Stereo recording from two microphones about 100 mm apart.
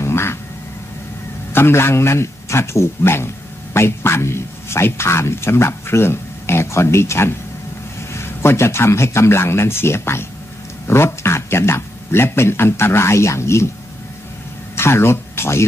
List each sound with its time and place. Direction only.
0.0 s vehicle: 25° left (ahead or behind)
1.5 s a man's voice: 25° left (ahead or behind)
14.8 s speech: 25° left (ahead or behind)